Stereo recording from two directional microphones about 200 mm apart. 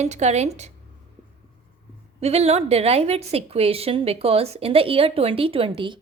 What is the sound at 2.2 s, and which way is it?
A woman's voice, 30° right (ahead or behind).